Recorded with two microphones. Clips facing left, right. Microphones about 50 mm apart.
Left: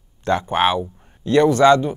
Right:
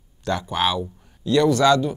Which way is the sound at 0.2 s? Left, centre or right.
Left.